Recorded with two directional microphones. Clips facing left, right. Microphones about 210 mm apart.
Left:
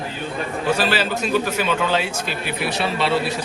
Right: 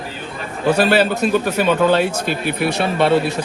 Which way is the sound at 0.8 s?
55° right (ahead or behind).